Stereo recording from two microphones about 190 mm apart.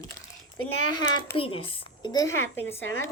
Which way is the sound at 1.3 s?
30° left (ahead or behind).